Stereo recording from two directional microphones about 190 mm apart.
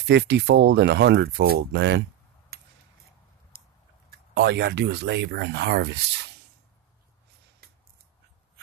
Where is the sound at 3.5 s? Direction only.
55° right (ahead or behind).